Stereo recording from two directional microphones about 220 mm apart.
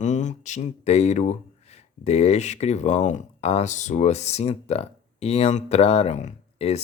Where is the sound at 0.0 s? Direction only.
35° left (ahead or behind).